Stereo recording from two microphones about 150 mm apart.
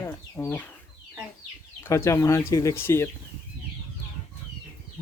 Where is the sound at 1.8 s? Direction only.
20° left (ahead or behind).